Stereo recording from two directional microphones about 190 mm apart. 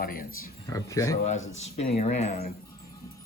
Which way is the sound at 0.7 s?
15° left (ahead or behind).